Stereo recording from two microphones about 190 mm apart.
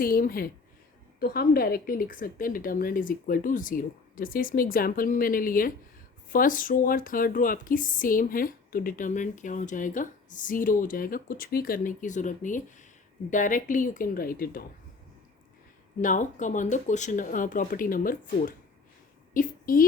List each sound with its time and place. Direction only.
0.0 s speech: 50° left (ahead or behind)
16.0 s a woman's voice: 40° left (ahead or behind)